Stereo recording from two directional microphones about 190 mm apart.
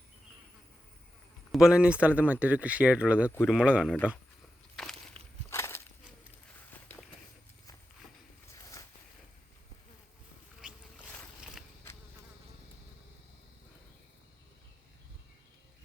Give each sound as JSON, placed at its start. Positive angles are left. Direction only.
{"t": 1.5, "sound": "speech", "side_deg": -5}
{"t": 5.2, "sound": "walk", "side_deg": -30}
{"t": 5.5, "sound": "walk", "side_deg": 15}
{"t": 11.1, "sound": "boat", "side_deg": 0}